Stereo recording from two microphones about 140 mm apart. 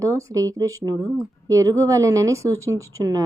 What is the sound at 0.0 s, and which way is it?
Speech, 20° right (ahead or behind).